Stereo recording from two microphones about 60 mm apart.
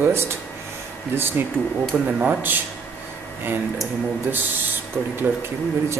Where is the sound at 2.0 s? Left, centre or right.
Right.